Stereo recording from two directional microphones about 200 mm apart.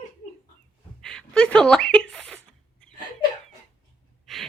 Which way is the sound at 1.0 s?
5° left (ahead or behind).